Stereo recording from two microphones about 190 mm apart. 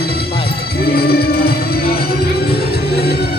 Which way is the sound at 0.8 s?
55° left (ahead or behind).